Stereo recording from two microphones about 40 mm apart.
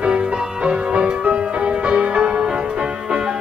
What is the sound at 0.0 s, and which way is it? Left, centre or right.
Music, right.